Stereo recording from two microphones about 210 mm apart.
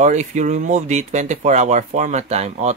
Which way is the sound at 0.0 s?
35° right (ahead or behind).